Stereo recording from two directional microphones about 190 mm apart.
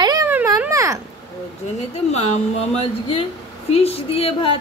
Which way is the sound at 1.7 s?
35° left (ahead or behind).